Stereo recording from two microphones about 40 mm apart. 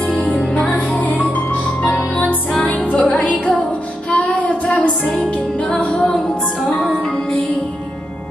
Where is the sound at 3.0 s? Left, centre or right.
Left.